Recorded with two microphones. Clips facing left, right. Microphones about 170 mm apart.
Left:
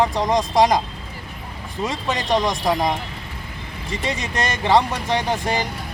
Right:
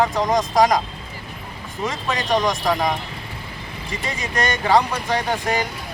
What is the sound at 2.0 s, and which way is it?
Speech, 25° left (ahead or behind).